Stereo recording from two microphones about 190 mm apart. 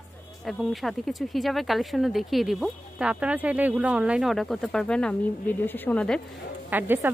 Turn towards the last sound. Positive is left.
turn(degrees=-10)  # may be behind; listen again after turning